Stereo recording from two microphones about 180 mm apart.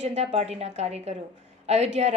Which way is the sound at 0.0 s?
40° right (ahead or behind).